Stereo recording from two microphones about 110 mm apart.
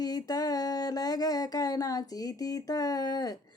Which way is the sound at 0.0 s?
35° left (ahead or behind).